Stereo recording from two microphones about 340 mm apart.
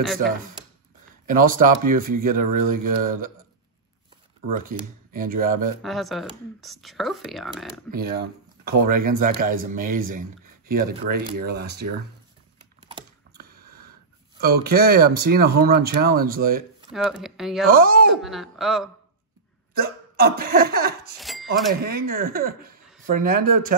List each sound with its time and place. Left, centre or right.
1.2 s speech: right
4.5 s speech: right
5.8 s speech: centre
7.9 s speech: right
13.3 s a sound: right
14.4 s speech: right
16.9 s speech: centre
17.6 s speech: right
18.1 s speech: centre
19.7 s speech: right
21.2 s a sound: centre
22.1 s speech: right